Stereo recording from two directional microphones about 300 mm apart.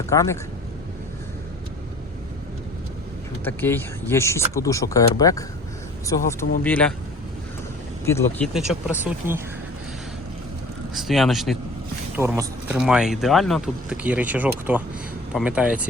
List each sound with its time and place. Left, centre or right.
0.1 s speech: centre
3.4 s speech: centre
6.6 s speech: centre
8.0 s speech: centre
10.9 s speech: centre